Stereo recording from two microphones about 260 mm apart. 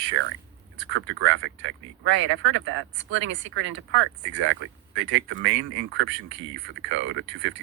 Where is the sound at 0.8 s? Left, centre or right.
Right.